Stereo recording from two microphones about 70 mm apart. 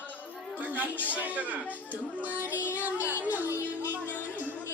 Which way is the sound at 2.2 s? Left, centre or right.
Right.